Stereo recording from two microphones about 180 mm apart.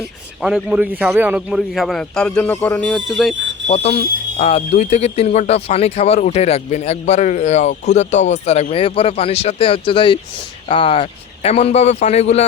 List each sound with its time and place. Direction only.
0.4 s a man's voice: 5° right (ahead or behind)
3.7 s speech: 35° left (ahead or behind)